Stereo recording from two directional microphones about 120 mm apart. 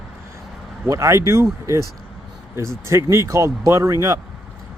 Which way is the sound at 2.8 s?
25° right (ahead or behind).